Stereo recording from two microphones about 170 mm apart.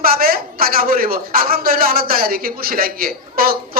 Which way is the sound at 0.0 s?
60° right (ahead or behind).